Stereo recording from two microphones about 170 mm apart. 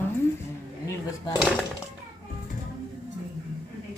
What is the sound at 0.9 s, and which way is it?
Speech, 20° left (ahead or behind).